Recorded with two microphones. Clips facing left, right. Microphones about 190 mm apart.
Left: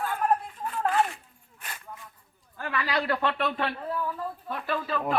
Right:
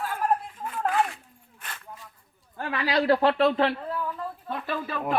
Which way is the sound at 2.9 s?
35° right (ahead or behind).